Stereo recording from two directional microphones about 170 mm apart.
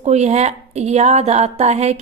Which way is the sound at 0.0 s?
40° right (ahead or behind).